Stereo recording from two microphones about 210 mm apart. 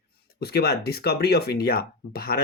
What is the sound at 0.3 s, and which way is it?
Speech, 50° left (ahead or behind).